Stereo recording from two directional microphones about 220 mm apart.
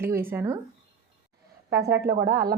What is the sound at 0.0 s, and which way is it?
Speech, 10° right (ahead or behind).